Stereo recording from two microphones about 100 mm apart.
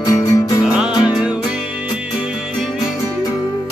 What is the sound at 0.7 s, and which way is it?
Music, 5° right (ahead or behind).